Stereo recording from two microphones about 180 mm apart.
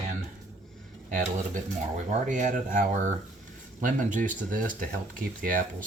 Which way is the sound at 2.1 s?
45° right (ahead or behind).